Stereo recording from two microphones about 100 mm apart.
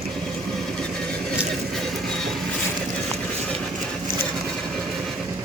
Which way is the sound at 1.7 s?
Centre (ahead or behind).